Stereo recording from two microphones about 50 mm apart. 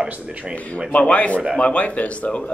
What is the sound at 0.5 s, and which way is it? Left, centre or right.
Speech, left.